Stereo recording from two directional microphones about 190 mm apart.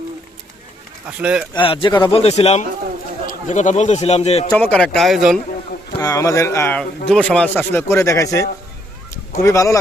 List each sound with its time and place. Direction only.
1.0 s speech: 5° right (ahead or behind)
1.5 s a man's voice: 25° left (ahead or behind)
4.5 s speech: 5° left (ahead or behind)
6.0 s speech: 20° left (ahead or behind)